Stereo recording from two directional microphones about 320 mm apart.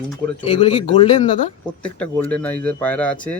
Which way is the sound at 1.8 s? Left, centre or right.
Centre.